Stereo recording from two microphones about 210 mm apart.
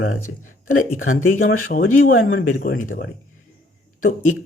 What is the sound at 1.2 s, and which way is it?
Speech, 40° left (ahead or behind).